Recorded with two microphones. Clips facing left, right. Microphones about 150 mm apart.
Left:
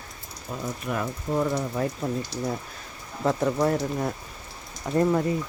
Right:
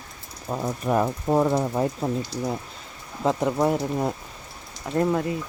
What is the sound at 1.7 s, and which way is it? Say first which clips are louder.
Speech: right 3 dB; 25° right (ahead or behind).